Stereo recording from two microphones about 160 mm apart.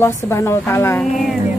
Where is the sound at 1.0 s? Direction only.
Centre (ahead or behind).